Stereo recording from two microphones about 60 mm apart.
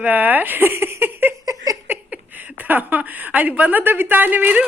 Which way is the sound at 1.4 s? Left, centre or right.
Right.